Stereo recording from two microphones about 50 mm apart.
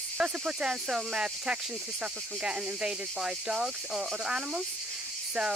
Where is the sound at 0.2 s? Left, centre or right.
Centre.